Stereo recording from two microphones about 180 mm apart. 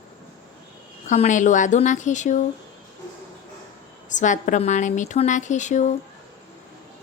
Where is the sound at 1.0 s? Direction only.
40° left (ahead or behind).